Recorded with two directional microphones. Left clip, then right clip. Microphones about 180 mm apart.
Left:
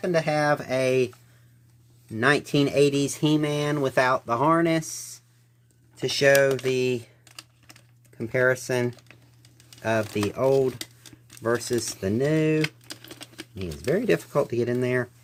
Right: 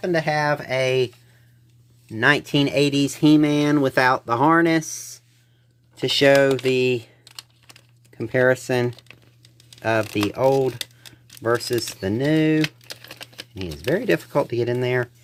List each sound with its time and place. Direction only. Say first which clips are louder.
0.0 s speech: right 2 dB; 40° right (ahead or behind)
2.1 s speech: right 3 dB; 35° right (ahead or behind)
6.0 s speech: right 3 dB; 40° right (ahead or behind)
8.2 s speech: right 4 dB; 35° right (ahead or behind)
9.8 s speech: right 4 dB; 40° right (ahead or behind)